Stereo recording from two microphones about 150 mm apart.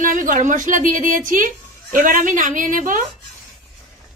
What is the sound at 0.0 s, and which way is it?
A woman's voice, 65° right (ahead or behind).